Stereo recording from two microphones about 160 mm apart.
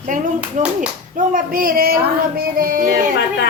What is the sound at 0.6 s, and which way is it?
Speech, 50° right (ahead or behind).